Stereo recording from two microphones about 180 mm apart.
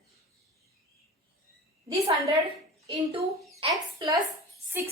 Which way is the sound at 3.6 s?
20° right (ahead or behind).